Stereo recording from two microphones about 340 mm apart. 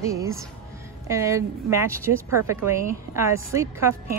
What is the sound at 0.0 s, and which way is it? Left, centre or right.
Speech, centre.